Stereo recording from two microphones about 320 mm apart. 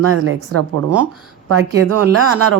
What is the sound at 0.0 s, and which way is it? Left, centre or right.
A woman's voice, right.